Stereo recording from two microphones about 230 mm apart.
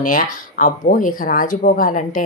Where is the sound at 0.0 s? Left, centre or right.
Left.